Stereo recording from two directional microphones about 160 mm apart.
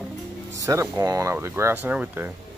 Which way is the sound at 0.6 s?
20° right (ahead or behind).